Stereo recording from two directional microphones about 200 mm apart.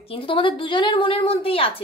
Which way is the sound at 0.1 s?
25° left (ahead or behind).